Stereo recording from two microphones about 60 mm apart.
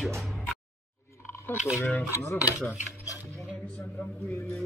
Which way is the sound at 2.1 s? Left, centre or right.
Left.